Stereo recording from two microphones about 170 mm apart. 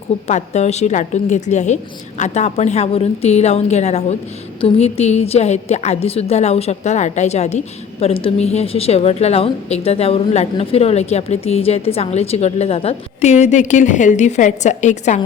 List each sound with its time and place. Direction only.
0.3 s a woman's voice: 40° left (ahead or behind)